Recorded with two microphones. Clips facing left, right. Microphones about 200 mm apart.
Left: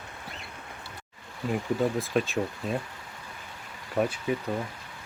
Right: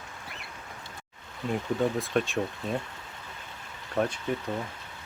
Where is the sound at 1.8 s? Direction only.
Centre (ahead or behind).